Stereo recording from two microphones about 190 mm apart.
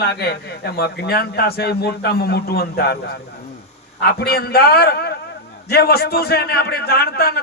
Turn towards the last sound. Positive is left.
turn(degrees=55)  # may be behind; listen again after turning